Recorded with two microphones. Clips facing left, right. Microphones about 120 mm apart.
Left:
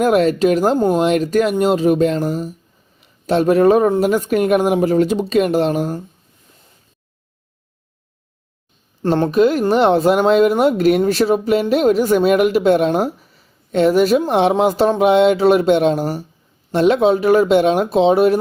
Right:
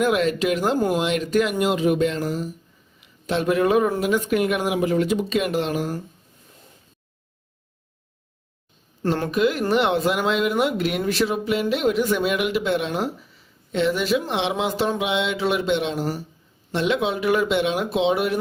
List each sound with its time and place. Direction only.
0.0 s speech: 40° left (ahead or behind)
9.0 s speech: 30° left (ahead or behind)